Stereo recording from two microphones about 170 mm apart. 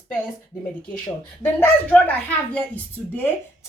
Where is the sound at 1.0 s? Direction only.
5° left (ahead or behind).